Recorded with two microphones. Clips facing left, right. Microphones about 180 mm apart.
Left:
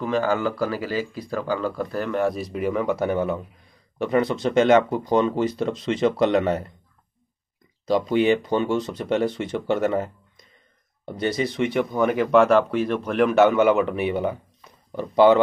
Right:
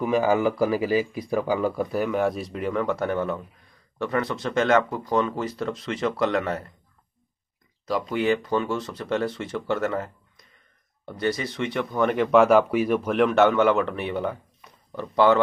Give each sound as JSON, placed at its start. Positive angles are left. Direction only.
{"t": 0.0, "sound": "speech", "side_deg": -10}
{"t": 7.9, "sound": "speech", "side_deg": 25}